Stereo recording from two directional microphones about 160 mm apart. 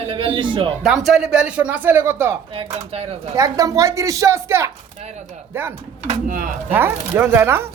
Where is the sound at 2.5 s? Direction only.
35° right (ahead or behind).